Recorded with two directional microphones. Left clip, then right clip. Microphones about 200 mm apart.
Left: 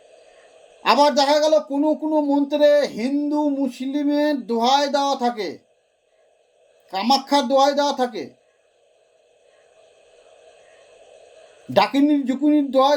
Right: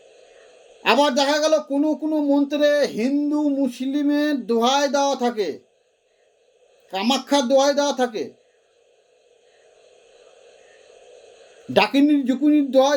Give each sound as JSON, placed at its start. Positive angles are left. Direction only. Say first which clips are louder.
{"t": 0.8, "sound": "a man's voice", "louder": "left 2 dB", "side_deg": -5}
{"t": 6.9, "sound": "speech", "louder": "left 2 dB", "side_deg": -5}
{"t": 11.7, "sound": "a man's voice", "louder": "even", "side_deg": -5}